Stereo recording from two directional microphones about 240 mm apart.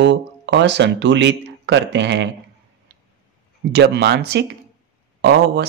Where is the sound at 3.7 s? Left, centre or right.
Right.